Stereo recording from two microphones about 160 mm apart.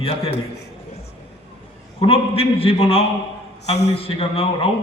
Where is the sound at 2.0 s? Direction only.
35° left (ahead or behind).